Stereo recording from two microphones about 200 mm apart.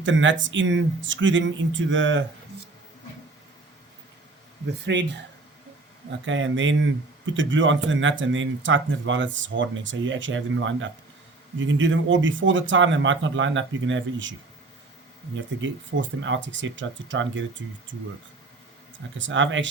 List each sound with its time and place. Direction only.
0.0 s speech: 70° right (ahead or behind)
4.9 s speech: 60° right (ahead or behind)
6.2 s speech: 70° right (ahead or behind)
15.4 s speech: 65° right (ahead or behind)
19.2 s speech: 70° right (ahead or behind)